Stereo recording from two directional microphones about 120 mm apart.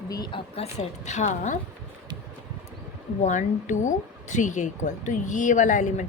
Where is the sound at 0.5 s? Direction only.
65° left (ahead or behind); by 1.5 s 80° left.